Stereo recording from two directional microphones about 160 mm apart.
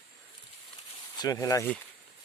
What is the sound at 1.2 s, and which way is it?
Speech, 20° left (ahead or behind).